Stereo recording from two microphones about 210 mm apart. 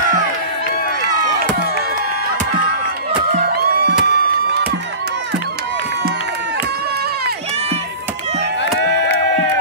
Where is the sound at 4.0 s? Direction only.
50° right (ahead or behind).